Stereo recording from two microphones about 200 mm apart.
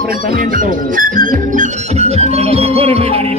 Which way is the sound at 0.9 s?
45° right (ahead or behind).